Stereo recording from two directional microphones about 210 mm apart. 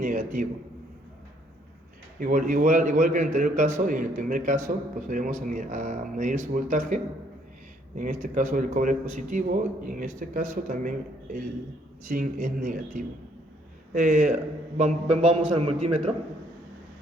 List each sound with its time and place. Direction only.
0.0 s a man's voice: 40° right (ahead or behind)
2.1 s a man's voice: 40° right (ahead or behind)